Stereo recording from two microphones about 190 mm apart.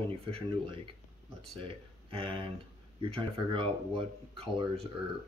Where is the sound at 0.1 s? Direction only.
30° right (ahead or behind).